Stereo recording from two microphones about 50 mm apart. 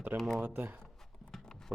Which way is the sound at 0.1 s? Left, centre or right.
Right.